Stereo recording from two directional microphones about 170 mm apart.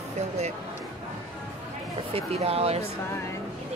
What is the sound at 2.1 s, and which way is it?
Speech, 35° right (ahead or behind).